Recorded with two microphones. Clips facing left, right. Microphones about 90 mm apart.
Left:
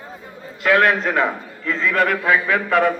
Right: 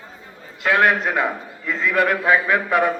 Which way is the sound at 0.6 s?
20° right (ahead or behind).